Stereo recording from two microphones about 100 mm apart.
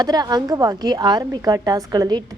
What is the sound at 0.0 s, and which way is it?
A woman's voice, 45° right (ahead or behind).